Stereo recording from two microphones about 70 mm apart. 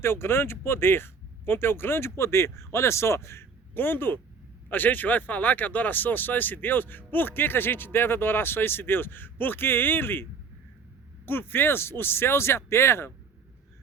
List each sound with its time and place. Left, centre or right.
0.0 s speech: left
11.3 s speech: left